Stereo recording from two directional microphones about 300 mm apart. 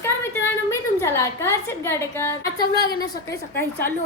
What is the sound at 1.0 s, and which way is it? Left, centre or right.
A woman's voice, centre.